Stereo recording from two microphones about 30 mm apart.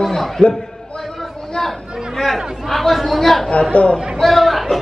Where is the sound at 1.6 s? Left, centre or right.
Centre.